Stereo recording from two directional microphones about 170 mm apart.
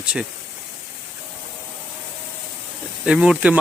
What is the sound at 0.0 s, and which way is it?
Speech, 5° right (ahead or behind).